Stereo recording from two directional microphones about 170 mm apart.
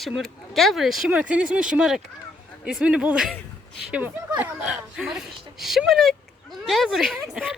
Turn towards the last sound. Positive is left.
turn(degrees=0)  # may be behind; listen again after turning